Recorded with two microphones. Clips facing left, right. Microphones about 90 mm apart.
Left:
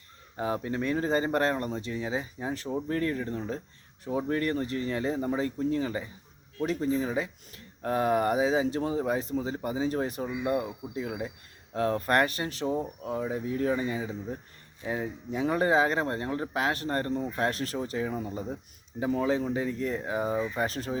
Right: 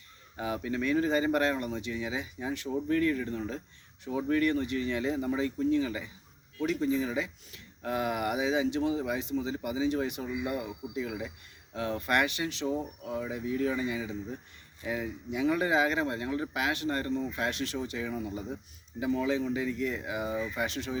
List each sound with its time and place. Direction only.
0.3 s speech: 35° left (ahead or behind)